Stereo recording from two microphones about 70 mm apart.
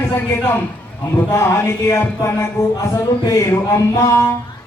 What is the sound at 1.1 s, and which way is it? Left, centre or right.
A man's voice, left.